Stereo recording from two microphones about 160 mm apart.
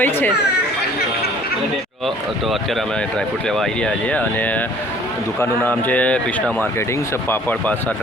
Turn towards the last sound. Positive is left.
turn(degrees=10)  # may be behind; listen again after turning